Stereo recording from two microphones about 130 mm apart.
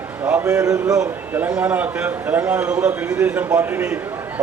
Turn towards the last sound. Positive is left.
turn(degrees=-15)  # may be behind; listen again after turning